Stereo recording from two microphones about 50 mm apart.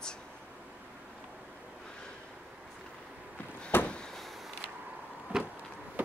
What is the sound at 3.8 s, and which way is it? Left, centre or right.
Vehicle, centre.